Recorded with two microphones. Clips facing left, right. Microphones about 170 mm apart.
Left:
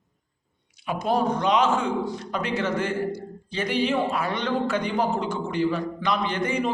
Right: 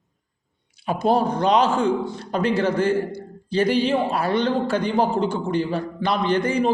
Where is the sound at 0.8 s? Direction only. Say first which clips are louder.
Right 4 dB; 30° right (ahead or behind).